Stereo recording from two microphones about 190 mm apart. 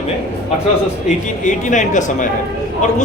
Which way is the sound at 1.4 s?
40° left (ahead or behind).